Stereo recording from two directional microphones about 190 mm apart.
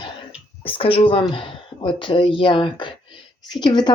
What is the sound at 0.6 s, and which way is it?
Speech, 30° left (ahead or behind).